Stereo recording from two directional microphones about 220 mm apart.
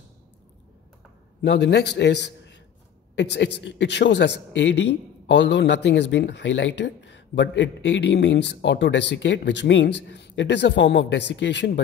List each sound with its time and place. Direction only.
1.4 s a man's voice: 50° left (ahead or behind)